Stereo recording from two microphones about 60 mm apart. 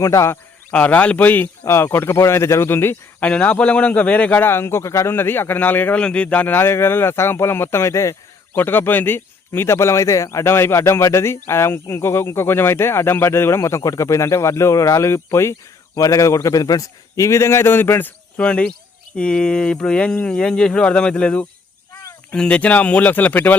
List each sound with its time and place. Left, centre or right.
0.0 s speech: left
0.7 s speech: left
1.6 s speech: left
3.2 s speech: left
4.4 s speech: left
6.0 s speech: centre
6.6 s speech: left
8.5 s speech: left
9.5 s speech: left
10.4 s speech: left
16.0 s a man's voice: left
18.3 s speech: centre